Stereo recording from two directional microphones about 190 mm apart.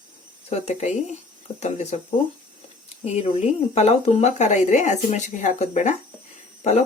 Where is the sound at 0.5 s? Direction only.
35° left (ahead or behind).